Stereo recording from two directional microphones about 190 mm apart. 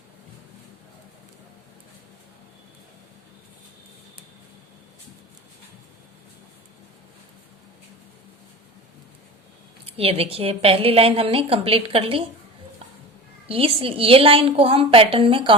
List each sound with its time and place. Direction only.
9.8 s a woman's voice: 30° right (ahead or behind)
13.5 s a woman's voice: 30° right (ahead or behind)